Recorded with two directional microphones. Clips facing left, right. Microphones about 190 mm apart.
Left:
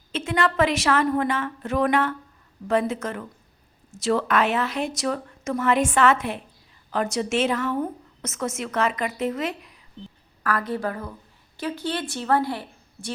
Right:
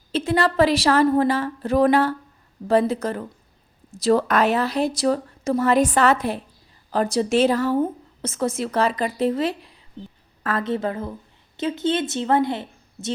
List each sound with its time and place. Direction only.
0.1 s a woman's voice: 35° right (ahead or behind)